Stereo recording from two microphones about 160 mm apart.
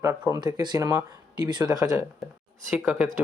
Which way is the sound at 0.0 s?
20° right (ahead or behind).